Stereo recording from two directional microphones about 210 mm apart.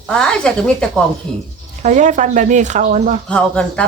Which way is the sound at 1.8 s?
35° right (ahead or behind).